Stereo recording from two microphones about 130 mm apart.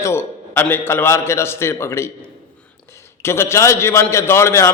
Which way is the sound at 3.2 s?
20° left (ahead or behind).